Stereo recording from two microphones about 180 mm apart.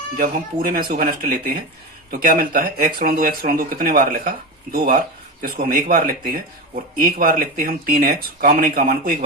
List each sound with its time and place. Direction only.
0.7 s speech: 55° right (ahead or behind)